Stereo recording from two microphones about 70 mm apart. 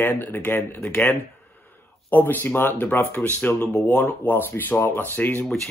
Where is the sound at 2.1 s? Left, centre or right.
Left.